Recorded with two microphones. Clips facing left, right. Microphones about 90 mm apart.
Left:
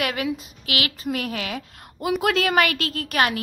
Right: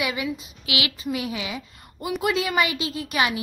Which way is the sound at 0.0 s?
60° left (ahead or behind).